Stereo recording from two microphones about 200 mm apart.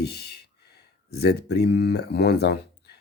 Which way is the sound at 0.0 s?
55° left (ahead or behind).